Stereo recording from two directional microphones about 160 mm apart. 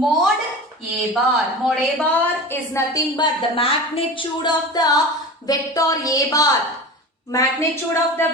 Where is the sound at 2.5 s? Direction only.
20° left (ahead or behind).